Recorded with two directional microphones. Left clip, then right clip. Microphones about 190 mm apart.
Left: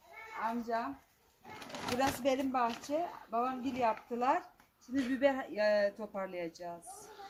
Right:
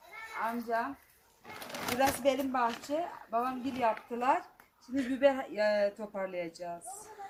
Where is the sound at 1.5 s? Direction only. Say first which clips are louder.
Right 2 dB; 15° right (ahead or behind).